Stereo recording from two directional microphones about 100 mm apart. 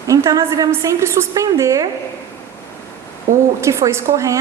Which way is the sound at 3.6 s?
30° right (ahead or behind).